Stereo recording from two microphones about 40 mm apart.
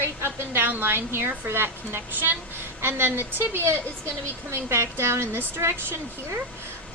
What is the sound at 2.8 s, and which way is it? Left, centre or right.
Speech, right.